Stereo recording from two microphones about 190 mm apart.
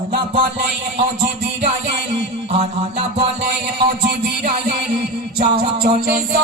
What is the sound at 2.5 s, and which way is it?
Music, 35° right (ahead or behind).